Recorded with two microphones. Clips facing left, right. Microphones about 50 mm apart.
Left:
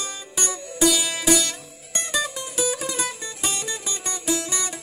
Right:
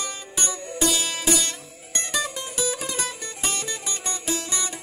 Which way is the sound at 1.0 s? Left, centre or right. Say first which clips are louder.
Left 3 dB; left.